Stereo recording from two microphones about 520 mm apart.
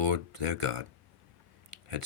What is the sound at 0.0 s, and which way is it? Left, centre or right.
Speech, right.